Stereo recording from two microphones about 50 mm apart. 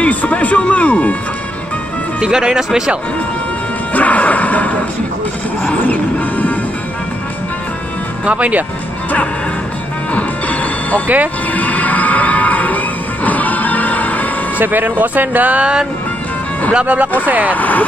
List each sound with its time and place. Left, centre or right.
0.0 s music: left
2.1 s speech: centre
3.9 s music: left
8.3 s speech: right
10.1 s music: left
14.6 s speech: right
15.6 s speech: centre
16.7 s speech: right
17.6 s speech: left